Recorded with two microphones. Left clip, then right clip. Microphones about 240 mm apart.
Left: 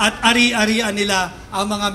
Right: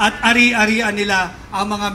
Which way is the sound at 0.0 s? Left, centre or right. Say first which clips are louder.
Right 2 dB; left.